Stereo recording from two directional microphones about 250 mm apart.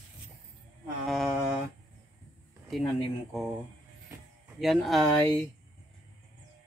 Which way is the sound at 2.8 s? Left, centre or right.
Centre.